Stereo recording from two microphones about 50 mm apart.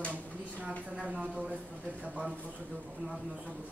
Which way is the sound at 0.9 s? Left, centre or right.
Right.